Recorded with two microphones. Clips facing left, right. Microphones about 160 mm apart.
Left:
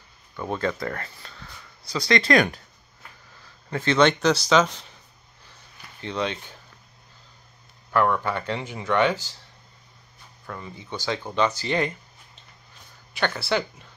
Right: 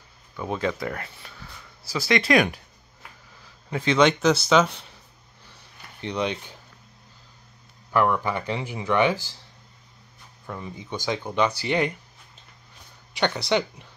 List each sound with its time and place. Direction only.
0.4 s speech: 5° right (ahead or behind)
3.7 s speech: 10° right (ahead or behind)
5.9 s speech: 15° right (ahead or behind)
7.9 s speech: 10° right (ahead or behind)
10.4 s speech: 10° right (ahead or behind)
13.2 s speech: 20° right (ahead or behind)